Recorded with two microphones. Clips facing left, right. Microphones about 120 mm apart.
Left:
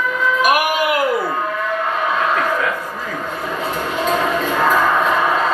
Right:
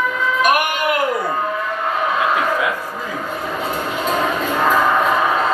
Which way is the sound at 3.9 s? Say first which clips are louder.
Left 2 dB; centre (ahead or behind).